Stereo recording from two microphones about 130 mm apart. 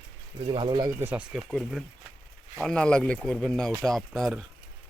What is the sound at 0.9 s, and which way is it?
Speech, 15° right (ahead or behind).